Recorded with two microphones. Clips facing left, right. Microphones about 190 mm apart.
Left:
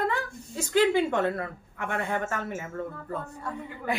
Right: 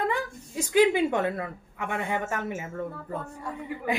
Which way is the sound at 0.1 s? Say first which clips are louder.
Right 2 dB; 15° right (ahead or behind).